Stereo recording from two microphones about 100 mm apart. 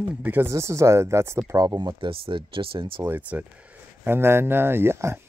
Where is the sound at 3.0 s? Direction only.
15° right (ahead or behind).